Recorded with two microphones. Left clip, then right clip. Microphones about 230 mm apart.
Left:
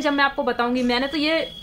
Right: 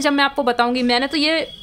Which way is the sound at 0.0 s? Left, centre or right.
Right.